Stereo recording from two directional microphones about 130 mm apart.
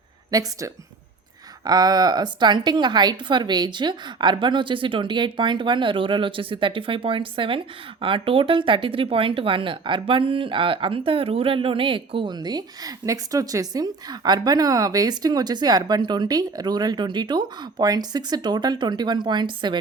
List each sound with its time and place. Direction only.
0.3 s speech: 30° right (ahead or behind)